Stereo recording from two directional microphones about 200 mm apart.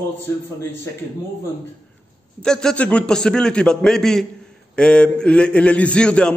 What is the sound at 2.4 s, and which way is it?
A man's voice, 5° left (ahead or behind).